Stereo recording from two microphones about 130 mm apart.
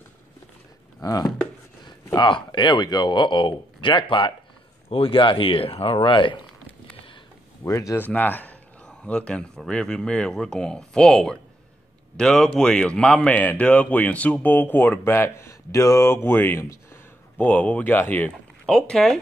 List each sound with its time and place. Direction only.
1.0 s speech: 30° left (ahead or behind)
7.6 s speech: 25° left (ahead or behind)
8.0 s a man's voice: 15° left (ahead or behind)